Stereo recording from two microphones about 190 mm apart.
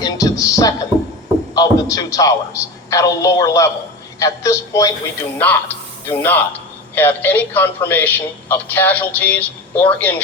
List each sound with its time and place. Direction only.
0.0 s a man's voice: 20° left (ahead or behind)